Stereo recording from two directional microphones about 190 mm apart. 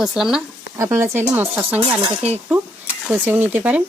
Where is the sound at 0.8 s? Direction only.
15° right (ahead or behind).